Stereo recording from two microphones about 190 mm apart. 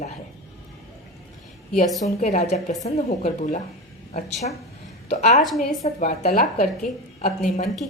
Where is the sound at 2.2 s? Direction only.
40° left (ahead or behind).